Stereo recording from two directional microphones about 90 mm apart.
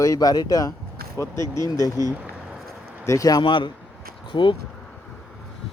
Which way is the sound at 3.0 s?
40° left (ahead or behind).